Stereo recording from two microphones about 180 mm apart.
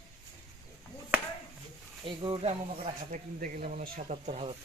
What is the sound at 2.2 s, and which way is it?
Speech, 30° right (ahead or behind).